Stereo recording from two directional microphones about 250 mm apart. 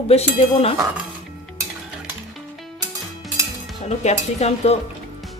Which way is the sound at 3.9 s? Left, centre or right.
Left.